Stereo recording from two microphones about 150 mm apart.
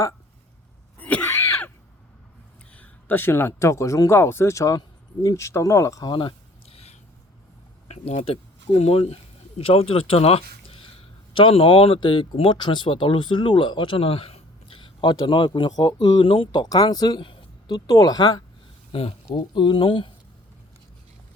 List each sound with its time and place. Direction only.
0.9 s screaming: 10° left (ahead or behind)
2.7 s speech: 10° left (ahead or behind); by 20.1 s 35° left (ahead or behind)